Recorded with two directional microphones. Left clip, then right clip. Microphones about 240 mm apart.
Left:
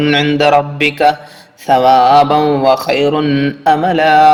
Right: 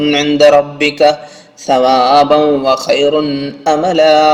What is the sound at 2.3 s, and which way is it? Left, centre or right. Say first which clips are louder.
Speech: right 1 dB; left.